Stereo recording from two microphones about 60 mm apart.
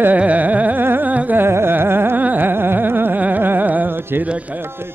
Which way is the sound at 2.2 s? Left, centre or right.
Right.